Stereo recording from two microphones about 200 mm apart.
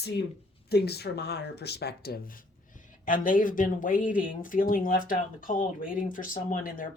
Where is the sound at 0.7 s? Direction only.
55° left (ahead or behind).